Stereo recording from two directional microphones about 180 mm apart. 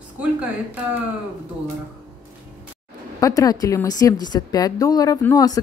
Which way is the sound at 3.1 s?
20° left (ahead or behind).